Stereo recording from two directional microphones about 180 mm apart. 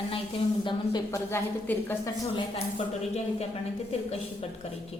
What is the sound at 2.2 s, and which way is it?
Speech, 30° left (ahead or behind).